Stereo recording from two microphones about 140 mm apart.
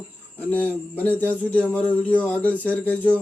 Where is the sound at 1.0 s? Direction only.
10° left (ahead or behind).